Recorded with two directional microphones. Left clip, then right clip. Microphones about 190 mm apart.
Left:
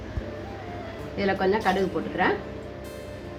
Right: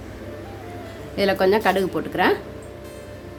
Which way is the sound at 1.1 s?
90° right.